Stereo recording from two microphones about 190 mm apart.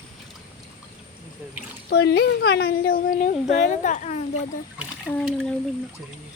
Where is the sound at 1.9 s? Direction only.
65° left (ahead or behind); by 4.2 s 40° left (ahead or behind).